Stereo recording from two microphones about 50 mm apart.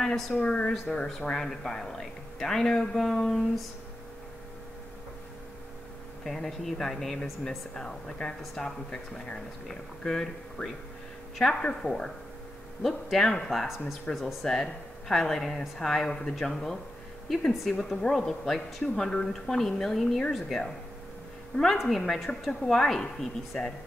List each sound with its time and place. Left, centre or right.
0.0 s a woman's voice: centre
0.3 s a woman's voice: left
1.3 s a man's voice: centre
6.2 s a man's voice: centre
14.2 s a man's voice: centre
21.7 s a man's voice: centre